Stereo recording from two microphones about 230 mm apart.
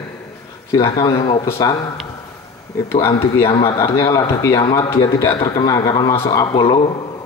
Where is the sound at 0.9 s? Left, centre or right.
Centre.